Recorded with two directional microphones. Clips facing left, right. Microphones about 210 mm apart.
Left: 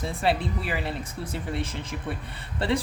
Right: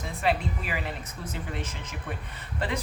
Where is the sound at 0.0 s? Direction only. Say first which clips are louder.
Left 2 dB; 30° left (ahead or behind).